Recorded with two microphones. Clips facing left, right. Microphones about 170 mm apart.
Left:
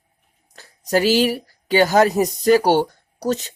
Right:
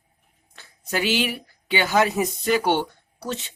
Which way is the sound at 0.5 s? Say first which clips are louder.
Left 8 dB; 40° left (ahead or behind).